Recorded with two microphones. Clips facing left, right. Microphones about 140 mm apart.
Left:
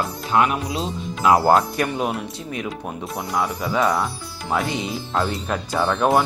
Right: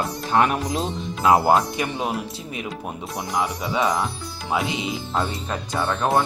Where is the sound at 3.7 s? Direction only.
20° right (ahead or behind).